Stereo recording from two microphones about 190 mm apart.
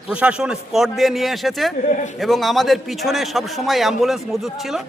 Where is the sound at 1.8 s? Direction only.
40° left (ahead or behind).